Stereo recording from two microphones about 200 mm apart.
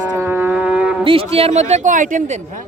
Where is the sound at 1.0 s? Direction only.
30° right (ahead or behind).